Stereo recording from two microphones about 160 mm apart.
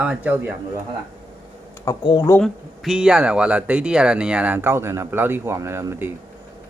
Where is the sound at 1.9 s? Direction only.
25° left (ahead or behind).